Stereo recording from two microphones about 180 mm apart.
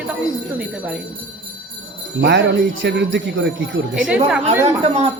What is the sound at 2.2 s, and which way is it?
Speech, 80° right.